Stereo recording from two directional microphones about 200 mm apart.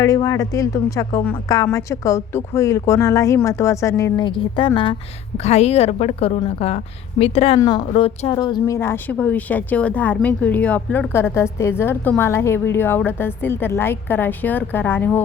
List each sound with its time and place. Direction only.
0.0 s a woman's voice: 15° left (ahead or behind)